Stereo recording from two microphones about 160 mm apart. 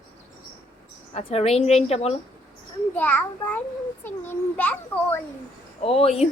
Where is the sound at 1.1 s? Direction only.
40° left (ahead or behind).